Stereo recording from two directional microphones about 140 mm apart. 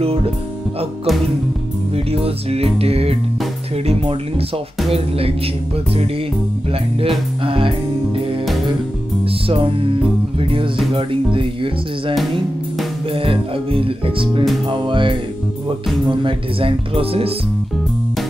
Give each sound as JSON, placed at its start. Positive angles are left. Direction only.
{"t": 2.1, "sound": "music", "side_deg": -45}
{"t": 7.4, "sound": "music", "side_deg": -40}
{"t": 9.5, "sound": "music", "side_deg": -40}